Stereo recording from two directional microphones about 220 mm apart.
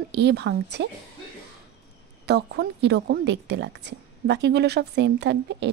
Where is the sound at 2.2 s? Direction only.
50° right (ahead or behind).